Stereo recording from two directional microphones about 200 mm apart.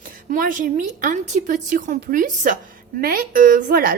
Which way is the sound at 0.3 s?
40° right (ahead or behind).